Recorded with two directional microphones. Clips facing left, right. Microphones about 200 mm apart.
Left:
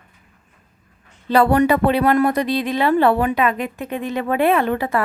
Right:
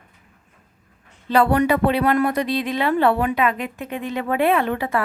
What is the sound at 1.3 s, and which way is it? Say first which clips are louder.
A woman's voice: left 2 dB; 35° left (ahead or behind).